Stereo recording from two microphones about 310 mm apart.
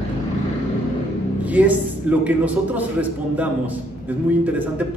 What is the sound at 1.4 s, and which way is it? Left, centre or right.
A man's voice, centre.